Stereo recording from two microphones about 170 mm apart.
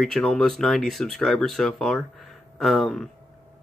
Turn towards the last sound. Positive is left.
turn(degrees=0)  # may be behind; listen again after turning